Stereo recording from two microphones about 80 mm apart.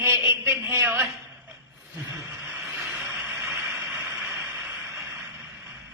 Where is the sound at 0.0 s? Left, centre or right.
Right.